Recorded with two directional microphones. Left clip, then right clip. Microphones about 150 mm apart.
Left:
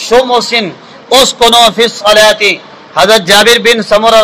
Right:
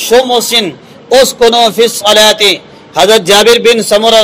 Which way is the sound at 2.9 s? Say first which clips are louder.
Even; 25° right (ahead or behind).